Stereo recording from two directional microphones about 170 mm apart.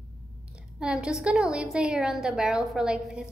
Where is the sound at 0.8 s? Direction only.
5° right (ahead or behind).